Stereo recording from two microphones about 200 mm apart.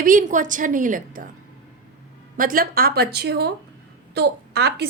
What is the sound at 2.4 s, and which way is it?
A woman's voice, 45° right (ahead or behind).